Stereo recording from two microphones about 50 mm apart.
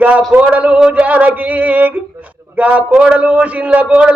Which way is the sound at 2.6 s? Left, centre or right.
Right.